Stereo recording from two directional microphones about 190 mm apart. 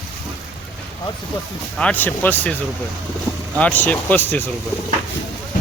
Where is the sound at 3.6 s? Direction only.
10° left (ahead or behind).